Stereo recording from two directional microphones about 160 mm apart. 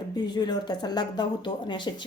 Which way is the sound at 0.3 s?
25° left (ahead or behind).